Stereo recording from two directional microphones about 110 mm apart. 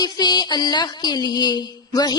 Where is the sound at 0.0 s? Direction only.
40° left (ahead or behind).